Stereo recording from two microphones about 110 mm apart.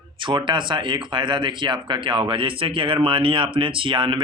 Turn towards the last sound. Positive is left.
turn(degrees=-50)  # may be behind; listen again after turning